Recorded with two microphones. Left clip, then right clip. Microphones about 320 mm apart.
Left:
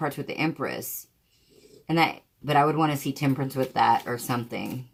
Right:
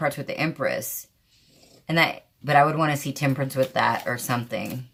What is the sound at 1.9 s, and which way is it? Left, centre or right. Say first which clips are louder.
Speech: right 2 dB; right.